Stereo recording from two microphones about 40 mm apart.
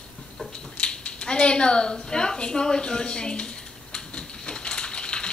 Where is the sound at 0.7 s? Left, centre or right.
Left.